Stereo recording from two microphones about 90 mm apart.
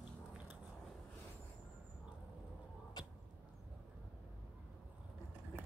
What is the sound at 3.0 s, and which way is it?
Arrow, 55° left (ahead or behind).